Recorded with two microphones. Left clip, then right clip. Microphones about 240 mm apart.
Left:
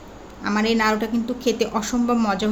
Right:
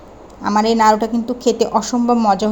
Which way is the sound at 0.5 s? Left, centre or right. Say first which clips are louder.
Right 8 dB; centre.